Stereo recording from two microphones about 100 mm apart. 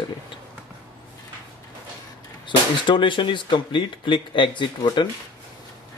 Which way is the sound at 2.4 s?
55° left (ahead or behind).